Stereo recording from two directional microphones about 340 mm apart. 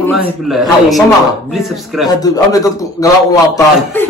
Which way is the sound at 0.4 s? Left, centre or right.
Centre.